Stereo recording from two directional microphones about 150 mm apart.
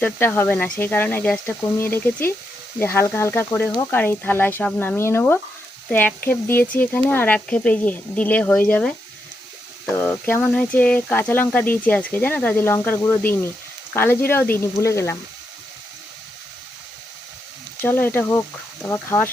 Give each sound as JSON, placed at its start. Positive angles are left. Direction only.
{"t": 0.0, "sound": "speech", "side_deg": 10}
{"t": 9.9, "sound": "speech", "side_deg": 10}
{"t": 17.7, "sound": "speech", "side_deg": 15}